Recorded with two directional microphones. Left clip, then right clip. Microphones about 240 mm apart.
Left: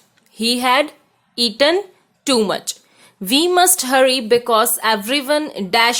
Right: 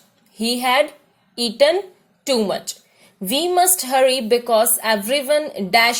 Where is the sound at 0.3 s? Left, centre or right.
Centre.